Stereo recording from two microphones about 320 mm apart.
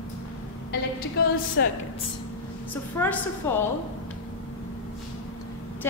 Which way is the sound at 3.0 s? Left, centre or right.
Centre.